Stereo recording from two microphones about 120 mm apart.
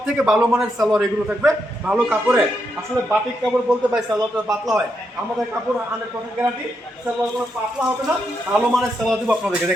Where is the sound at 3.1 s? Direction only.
5° right (ahead or behind).